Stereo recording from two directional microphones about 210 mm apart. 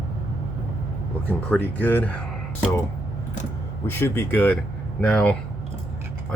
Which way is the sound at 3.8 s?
10° left (ahead or behind).